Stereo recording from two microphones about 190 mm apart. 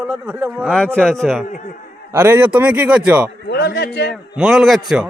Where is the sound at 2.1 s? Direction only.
10° right (ahead or behind).